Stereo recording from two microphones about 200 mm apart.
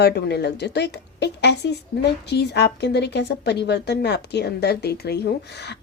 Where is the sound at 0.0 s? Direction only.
55° left (ahead or behind).